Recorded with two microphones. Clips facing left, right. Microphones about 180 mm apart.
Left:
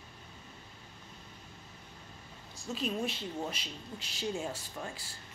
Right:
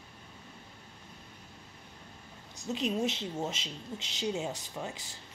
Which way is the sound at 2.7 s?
20° right (ahead or behind).